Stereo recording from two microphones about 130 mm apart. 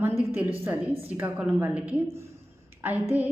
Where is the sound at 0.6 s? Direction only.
15° right (ahead or behind).